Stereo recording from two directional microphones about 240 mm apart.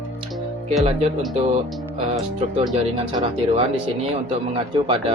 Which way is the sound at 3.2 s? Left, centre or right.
Right.